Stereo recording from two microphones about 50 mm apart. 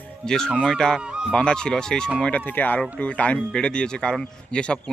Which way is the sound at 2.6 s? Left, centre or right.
Left.